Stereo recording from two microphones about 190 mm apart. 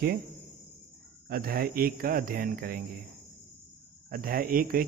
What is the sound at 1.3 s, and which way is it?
Speech, 50° right (ahead or behind).